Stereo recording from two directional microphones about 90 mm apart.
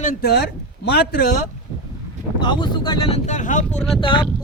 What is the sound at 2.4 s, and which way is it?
Speech, 60° left (ahead or behind).